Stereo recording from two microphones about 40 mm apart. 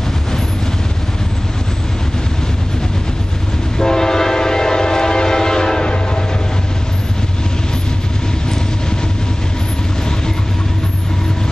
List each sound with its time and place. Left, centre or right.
3.7 s train horn: centre